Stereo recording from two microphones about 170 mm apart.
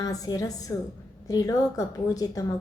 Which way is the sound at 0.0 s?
20° left (ahead or behind).